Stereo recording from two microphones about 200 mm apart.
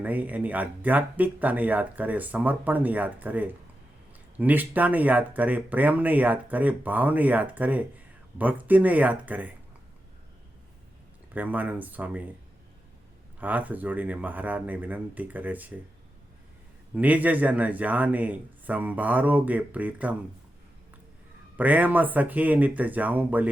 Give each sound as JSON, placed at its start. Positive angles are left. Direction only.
{"t": 0.0, "sound": "speech", "side_deg": -10}
{"t": 11.3, "sound": "speech", "side_deg": -10}
{"t": 13.4, "sound": "speech", "side_deg": -10}
{"t": 16.9, "sound": "speech", "side_deg": -10}
{"t": 21.5, "sound": "speech", "side_deg": -10}